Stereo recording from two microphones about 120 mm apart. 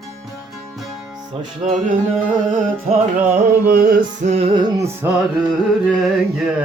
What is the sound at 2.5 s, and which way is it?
Music, 90° right.